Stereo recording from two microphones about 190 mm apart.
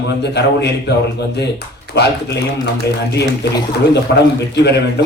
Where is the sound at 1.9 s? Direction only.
60° left (ahead or behind).